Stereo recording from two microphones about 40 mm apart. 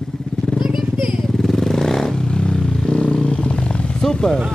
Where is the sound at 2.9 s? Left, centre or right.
Left.